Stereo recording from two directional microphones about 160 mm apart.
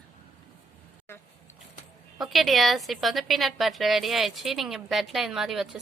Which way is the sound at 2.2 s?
Centre (ahead or behind).